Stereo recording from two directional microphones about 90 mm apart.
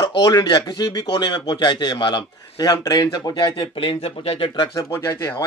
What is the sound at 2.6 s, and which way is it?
Speech, 45° left (ahead or behind).